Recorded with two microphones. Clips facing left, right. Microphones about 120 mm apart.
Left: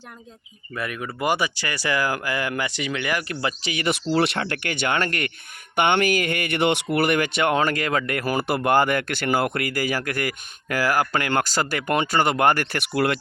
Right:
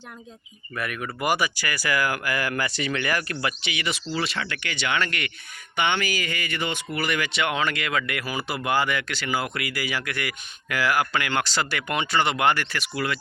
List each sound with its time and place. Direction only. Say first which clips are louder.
0.8 s speech: left 1 dB; 25° left (ahead or behind)
3.4 s speech: left 4 dB; 40° left (ahead or behind)
4.1 s speech: left 8 dB; 65° left (ahead or behind); by 5.3 s 45° left (ahead or behind)
5.7 s speech: left 6 dB; 55° left (ahead or behind)
6.9 s speech: left 6 dB; 55° left (ahead or behind)